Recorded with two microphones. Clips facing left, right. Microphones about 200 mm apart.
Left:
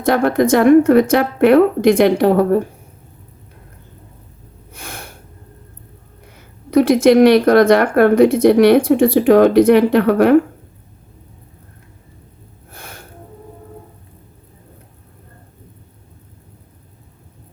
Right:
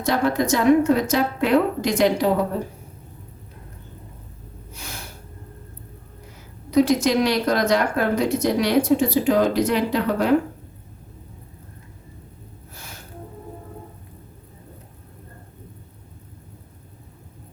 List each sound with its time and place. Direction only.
0.0 s speech: 55° left (ahead or behind)
4.7 s snort: 55° left (ahead or behind)
6.7 s speech: 55° left (ahead or behind)
12.7 s music: 55° left (ahead or behind)